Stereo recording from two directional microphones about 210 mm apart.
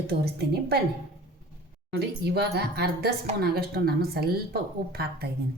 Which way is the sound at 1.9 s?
50° right (ahead or behind).